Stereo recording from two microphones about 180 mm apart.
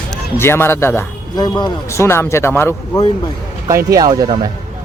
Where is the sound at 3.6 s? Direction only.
20° right (ahead or behind).